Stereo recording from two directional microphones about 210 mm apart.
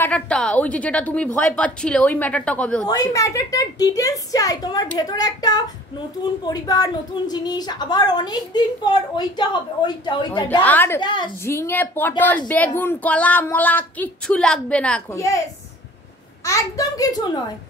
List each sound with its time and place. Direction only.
0.0 s a woman's voice: 5° left (ahead or behind)
2.9 s speech: 15° left (ahead or behind)
10.6 s speech: 10° left (ahead or behind)
11.0 s speech: 20° left (ahead or behind)
16.4 s speech: 15° left (ahead or behind)